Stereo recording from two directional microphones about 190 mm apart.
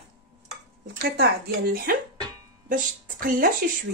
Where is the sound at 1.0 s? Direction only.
50° right (ahead or behind).